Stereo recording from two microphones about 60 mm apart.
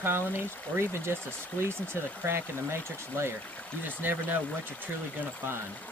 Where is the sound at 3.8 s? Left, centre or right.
Right.